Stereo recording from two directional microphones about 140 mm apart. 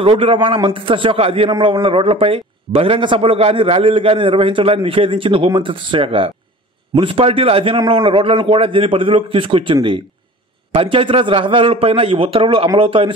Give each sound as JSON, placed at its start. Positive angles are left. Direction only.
{"t": 0.0, "sound": "a man's voice", "side_deg": -40}